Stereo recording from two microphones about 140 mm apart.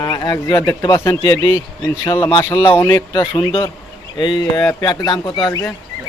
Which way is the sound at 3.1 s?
35° left (ahead or behind).